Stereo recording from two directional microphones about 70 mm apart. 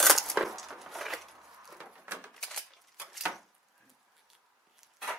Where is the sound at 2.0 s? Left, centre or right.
Right.